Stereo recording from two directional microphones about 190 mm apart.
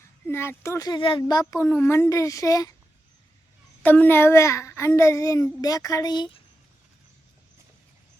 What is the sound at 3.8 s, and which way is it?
A child's voice, 10° left (ahead or behind).